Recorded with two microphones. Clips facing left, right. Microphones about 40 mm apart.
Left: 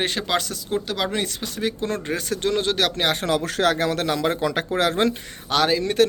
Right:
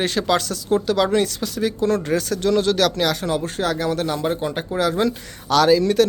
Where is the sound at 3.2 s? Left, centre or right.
Left.